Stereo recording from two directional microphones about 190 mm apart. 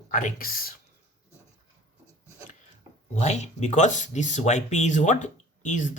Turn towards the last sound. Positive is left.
turn(degrees=40)  # may be behind; listen again after turning